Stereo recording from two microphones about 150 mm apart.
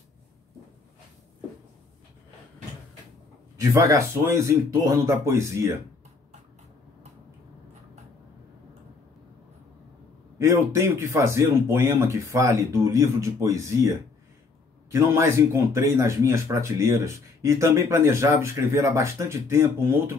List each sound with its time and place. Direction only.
3.5 s a man's voice: 20° right (ahead or behind)
10.4 s a man's voice: 20° right (ahead or behind)